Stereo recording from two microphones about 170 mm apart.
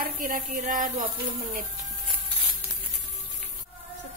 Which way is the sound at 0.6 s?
50° right (ahead or behind).